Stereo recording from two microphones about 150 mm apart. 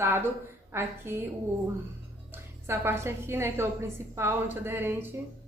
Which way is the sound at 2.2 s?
15° right (ahead or behind).